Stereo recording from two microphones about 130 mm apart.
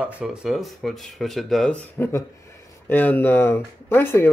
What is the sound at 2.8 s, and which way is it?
Speech, 15° left (ahead or behind).